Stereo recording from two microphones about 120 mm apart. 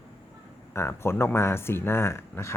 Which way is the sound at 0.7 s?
20° left (ahead or behind).